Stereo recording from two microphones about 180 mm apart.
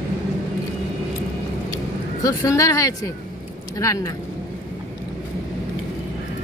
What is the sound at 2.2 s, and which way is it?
Speech, 15° left (ahead or behind).